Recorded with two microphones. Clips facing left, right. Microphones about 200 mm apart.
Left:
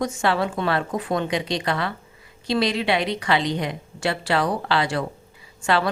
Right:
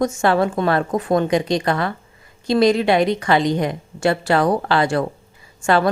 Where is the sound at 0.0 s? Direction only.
45° right (ahead or behind).